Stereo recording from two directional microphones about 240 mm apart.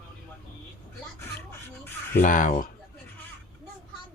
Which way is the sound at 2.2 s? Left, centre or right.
Left.